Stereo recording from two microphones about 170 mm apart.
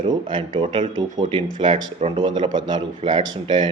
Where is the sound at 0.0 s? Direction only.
25° right (ahead or behind).